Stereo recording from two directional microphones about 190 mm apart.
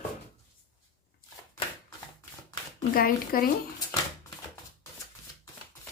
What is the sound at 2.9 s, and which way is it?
Speech, 50° left (ahead or behind).